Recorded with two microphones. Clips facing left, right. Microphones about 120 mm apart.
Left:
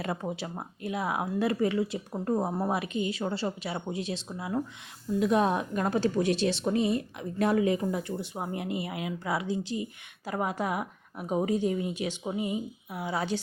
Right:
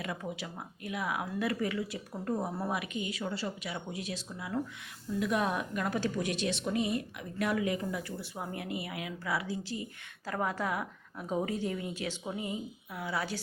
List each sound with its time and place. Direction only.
0.0 s a woman's voice: 35° left (ahead or behind)